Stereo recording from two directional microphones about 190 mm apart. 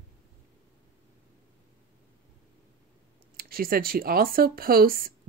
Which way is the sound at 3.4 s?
50° right (ahead or behind).